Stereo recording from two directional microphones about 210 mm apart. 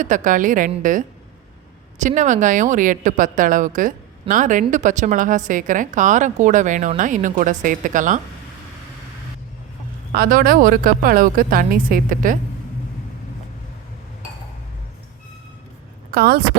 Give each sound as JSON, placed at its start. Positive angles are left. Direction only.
{"t": 0.0, "sound": "a woman's voice", "side_deg": -35}
{"t": 10.1, "sound": "speech", "side_deg": -45}
{"t": 16.1, "sound": "speech", "side_deg": -45}